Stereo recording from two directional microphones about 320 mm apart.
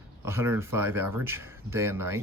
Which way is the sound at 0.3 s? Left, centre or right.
Centre.